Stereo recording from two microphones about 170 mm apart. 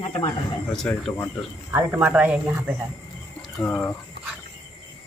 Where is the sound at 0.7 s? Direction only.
5° left (ahead or behind).